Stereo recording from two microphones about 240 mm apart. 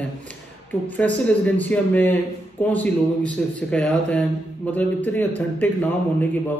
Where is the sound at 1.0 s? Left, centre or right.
Centre.